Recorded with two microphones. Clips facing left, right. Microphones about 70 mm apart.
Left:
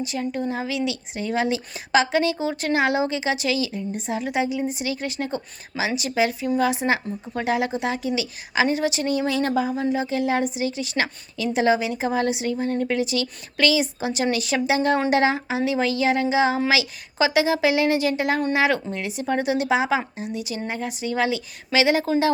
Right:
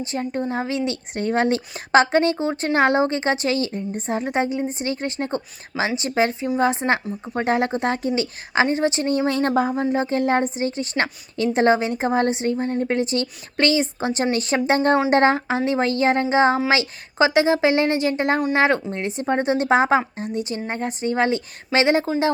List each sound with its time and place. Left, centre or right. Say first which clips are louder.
0.0 s a woman's voice: right 1 dB; right